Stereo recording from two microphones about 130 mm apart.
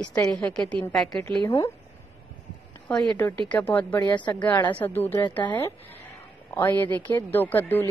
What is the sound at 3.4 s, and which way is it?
Speech, 10° left (ahead or behind).